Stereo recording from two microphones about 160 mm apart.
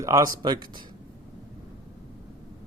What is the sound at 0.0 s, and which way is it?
Speech, 20° right (ahead or behind).